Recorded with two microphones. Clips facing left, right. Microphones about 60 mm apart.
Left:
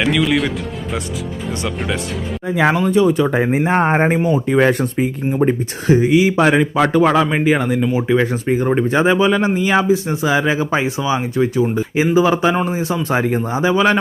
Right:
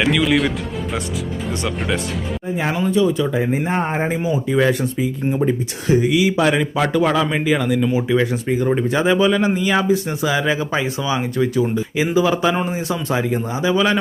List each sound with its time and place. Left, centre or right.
0.0 s speech: centre
2.6 s speech: left
4.6 s speech: left
5.4 s a man's voice: left